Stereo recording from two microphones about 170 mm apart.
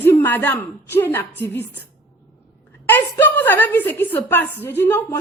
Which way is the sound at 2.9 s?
10° left (ahead or behind).